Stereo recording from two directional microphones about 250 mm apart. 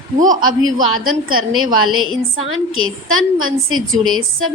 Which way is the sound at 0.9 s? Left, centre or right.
Right.